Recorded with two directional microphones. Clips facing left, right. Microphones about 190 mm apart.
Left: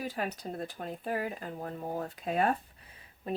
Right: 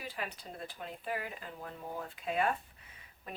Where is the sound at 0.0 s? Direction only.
45° left (ahead or behind).